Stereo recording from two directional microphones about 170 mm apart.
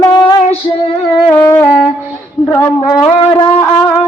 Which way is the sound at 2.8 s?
25° left (ahead or behind).